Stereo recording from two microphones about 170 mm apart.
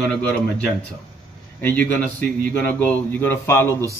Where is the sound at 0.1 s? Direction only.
10° left (ahead or behind).